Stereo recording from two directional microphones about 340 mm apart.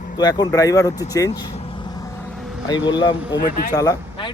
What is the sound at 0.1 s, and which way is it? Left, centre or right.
A man's voice, centre.